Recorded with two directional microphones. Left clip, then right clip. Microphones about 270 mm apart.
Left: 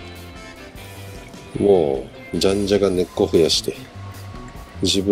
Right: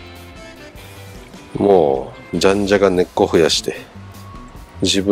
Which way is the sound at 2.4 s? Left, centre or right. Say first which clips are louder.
Right 4 dB; centre.